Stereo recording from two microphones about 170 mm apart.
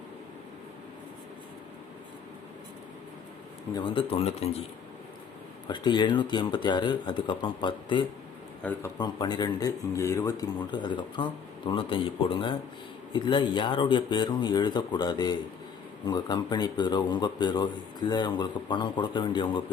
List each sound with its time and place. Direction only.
3.8 s speech: 30° left (ahead or behind)
5.6 s speech: 25° left (ahead or behind)